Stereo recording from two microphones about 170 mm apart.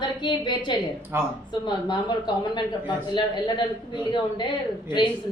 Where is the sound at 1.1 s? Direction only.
15° right (ahead or behind).